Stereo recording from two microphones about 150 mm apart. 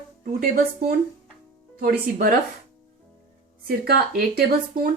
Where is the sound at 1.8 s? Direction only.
80° right.